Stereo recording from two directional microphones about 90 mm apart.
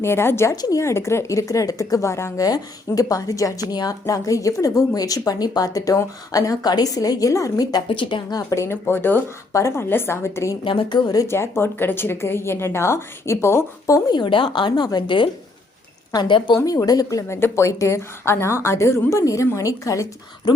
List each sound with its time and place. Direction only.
0.0 s speech: 30° left (ahead or behind)
0.5 s speech: 45° left (ahead or behind)
0.8 s a woman's voice: 30° left (ahead or behind)
2.5 s a woman's voice: 40° left (ahead or behind)
7.9 s speech: 65° left (ahead or behind)
8.3 s a woman's voice: 40° left (ahead or behind)
10.6 s speech: 70° left (ahead or behind)
11.2 s speech: 30° left (ahead or behind)
14.1 s speech: 60° left (ahead or behind)
16.6 s a woman's voice: 40° left (ahead or behind)